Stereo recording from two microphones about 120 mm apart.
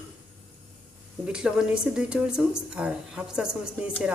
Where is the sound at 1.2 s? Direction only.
5° right (ahead or behind).